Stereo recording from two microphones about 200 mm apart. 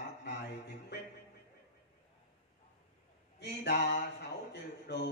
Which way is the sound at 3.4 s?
55° left (ahead or behind).